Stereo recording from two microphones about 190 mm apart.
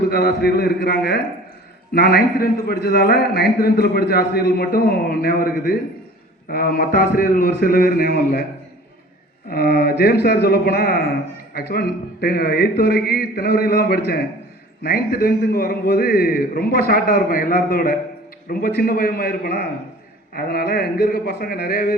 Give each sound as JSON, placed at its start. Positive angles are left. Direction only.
{"t": 0.1, "sound": "a man's voice", "side_deg": 55}
{"t": 9.5, "sound": "a man's voice", "side_deg": 55}